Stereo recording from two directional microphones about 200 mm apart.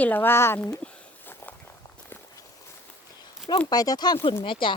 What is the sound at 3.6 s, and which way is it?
Speech, 20° left (ahead or behind).